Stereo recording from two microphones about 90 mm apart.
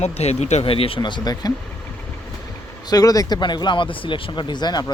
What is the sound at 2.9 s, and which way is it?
Speech, 40° left (ahead or behind).